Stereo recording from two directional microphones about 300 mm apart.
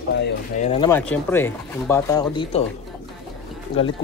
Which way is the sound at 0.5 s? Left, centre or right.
Left.